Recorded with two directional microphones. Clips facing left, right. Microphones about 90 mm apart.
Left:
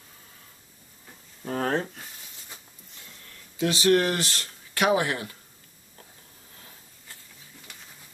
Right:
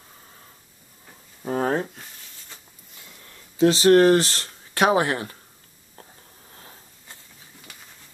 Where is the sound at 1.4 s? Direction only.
15° right (ahead or behind).